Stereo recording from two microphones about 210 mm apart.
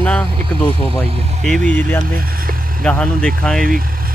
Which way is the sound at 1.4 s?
5° left (ahead or behind).